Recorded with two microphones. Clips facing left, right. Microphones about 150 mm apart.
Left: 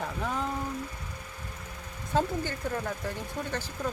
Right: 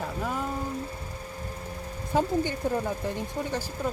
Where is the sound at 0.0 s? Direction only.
5° right (ahead or behind).